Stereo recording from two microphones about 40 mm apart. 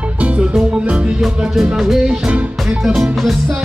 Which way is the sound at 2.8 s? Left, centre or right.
Centre.